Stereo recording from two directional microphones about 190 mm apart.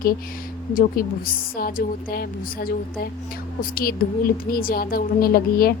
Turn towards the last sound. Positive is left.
turn(degrees=50)  # may be behind; listen again after turning